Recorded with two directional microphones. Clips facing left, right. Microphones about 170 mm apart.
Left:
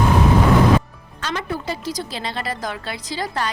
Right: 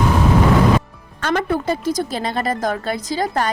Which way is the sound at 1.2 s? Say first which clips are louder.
Right 7 dB; 55° right (ahead or behind).